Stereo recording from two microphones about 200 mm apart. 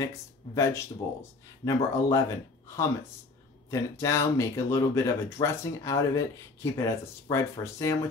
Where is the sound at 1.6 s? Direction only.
15° left (ahead or behind).